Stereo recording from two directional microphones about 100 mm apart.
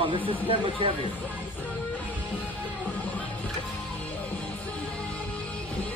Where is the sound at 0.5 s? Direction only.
60° right (ahead or behind).